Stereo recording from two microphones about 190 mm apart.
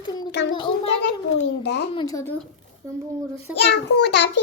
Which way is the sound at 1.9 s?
20° left (ahead or behind).